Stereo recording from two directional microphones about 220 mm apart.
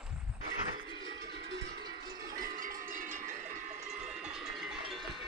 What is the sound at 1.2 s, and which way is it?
Music, 50° right (ahead or behind).